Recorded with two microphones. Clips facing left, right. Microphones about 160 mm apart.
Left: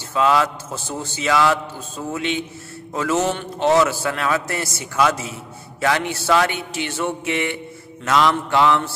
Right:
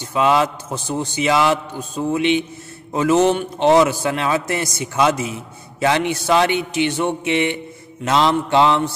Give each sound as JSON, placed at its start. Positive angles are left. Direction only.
{"t": 0.0, "sound": "a man's voice", "side_deg": -20}